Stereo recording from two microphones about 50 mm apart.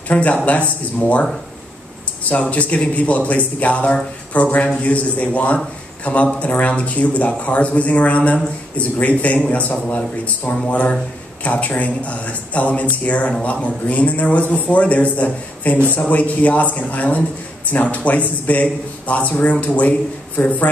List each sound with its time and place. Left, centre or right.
0.1 s a man's voice: left
2.2 s a man's voice: left